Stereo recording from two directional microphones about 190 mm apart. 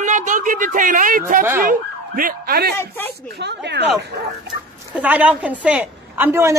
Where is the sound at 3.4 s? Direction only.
65° right (ahead or behind).